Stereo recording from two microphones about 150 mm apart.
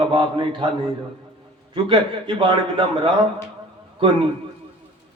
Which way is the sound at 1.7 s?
35° right (ahead or behind).